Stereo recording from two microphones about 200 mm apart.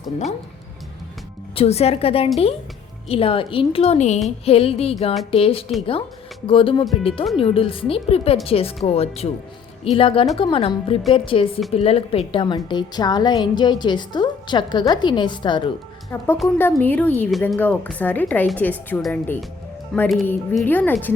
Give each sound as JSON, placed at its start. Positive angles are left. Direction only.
{"t": 1.5, "sound": "a woman's voice", "side_deg": 30}
{"t": 16.1, "sound": "a woman's voice", "side_deg": 10}